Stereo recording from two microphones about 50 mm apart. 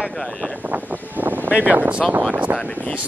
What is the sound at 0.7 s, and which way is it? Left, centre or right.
Speech, right.